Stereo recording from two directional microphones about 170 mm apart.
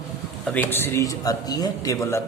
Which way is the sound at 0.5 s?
15° left (ahead or behind).